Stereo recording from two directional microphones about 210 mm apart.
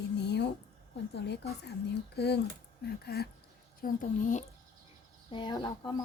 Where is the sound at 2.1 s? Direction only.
50° left (ahead or behind).